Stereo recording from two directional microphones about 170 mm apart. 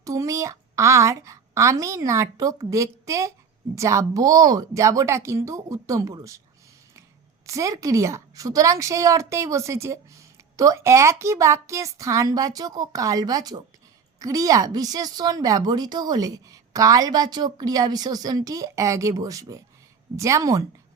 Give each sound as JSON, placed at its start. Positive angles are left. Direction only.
{"t": 0.0, "sound": "a woman's voice", "side_deg": -20}
{"t": 7.4, "sound": "a woman's voice", "side_deg": -20}